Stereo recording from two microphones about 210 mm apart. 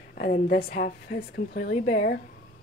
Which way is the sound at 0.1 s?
45° left (ahead or behind).